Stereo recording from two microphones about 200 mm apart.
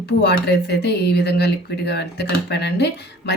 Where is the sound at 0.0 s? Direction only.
55° left (ahead or behind).